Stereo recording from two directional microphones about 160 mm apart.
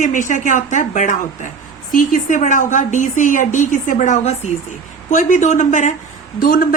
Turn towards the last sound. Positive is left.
turn(degrees=65)  # may be behind; listen again after turning